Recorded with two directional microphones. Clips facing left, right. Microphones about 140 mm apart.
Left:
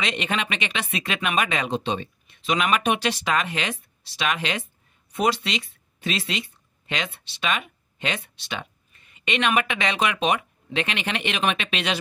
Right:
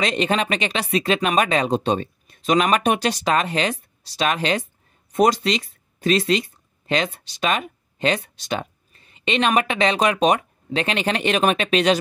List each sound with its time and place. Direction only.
0.0 s speech: 35° right (ahead or behind)